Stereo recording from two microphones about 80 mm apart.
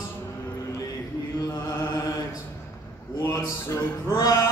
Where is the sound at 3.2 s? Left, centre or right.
Left.